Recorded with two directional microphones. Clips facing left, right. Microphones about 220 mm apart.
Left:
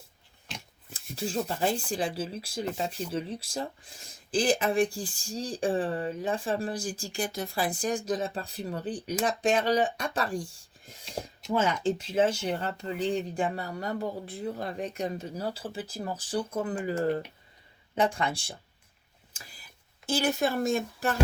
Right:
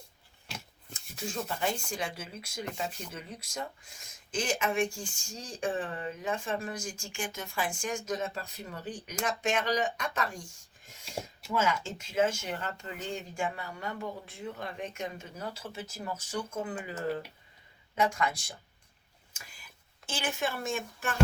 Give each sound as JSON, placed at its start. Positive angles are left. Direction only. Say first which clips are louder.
{"t": 1.1, "sound": "speech", "louder": "left 5 dB", "side_deg": 30}
{"t": 17.9, "sound": "speech", "louder": "left 2 dB", "side_deg": 30}
{"t": 19.3, "sound": "a sound", "louder": "left 2 dB", "side_deg": 35}
{"t": 20.1, "sound": "speech", "louder": "left 7 dB", "side_deg": 40}